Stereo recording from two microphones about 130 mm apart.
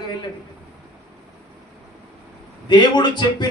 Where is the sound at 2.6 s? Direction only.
35° left (ahead or behind).